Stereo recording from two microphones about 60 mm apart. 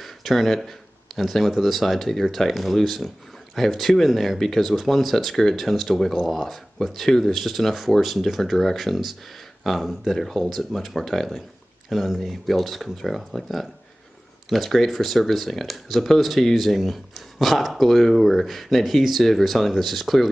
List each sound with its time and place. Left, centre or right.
0.0 s speech: centre